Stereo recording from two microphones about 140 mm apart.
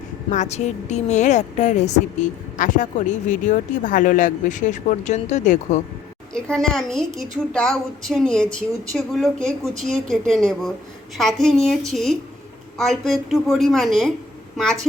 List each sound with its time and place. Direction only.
0.3 s a woman's voice: 55° left (ahead or behind)
6.3 s a woman's voice: 5° left (ahead or behind)